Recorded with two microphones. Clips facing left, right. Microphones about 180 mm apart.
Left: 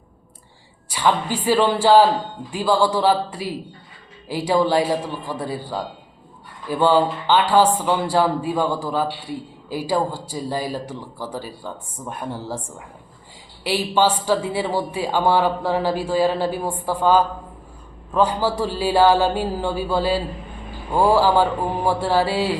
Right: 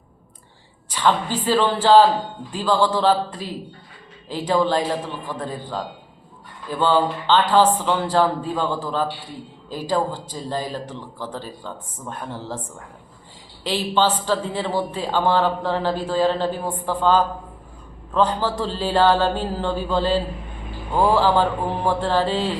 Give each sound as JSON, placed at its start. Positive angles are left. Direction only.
{"t": 0.9, "sound": "a man's voice", "side_deg": 10}
{"t": 13.7, "sound": "a man's voice", "side_deg": 10}